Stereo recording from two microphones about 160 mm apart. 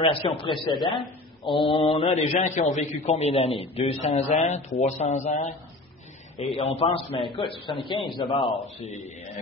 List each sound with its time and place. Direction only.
0.0 s a man's voice: 35° left (ahead or behind)
6.3 s a man's voice: 40° left (ahead or behind)